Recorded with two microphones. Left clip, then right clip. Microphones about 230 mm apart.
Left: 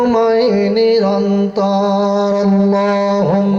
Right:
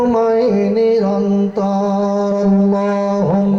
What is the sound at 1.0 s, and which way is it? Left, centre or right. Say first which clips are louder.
Speech: left 2 dB; left.